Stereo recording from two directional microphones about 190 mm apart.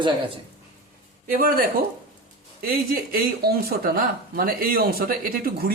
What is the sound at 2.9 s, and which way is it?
Speech, 50° right (ahead or behind).